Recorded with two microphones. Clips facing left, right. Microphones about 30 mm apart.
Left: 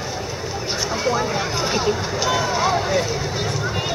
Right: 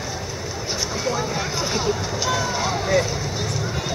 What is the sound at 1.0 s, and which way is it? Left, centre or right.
Run, centre.